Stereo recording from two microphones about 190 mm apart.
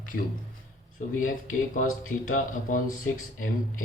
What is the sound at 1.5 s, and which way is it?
Speech, 45° left (ahead or behind).